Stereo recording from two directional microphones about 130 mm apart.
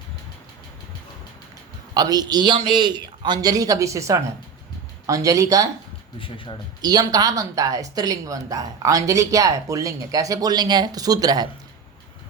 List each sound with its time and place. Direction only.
1.9 s a man's voice: 30° right (ahead or behind)
6.1 s speech: 40° left (ahead or behind)
6.8 s a woman's voice: 30° right (ahead or behind)